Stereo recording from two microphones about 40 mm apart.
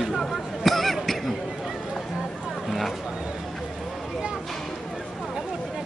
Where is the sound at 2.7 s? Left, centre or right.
Centre.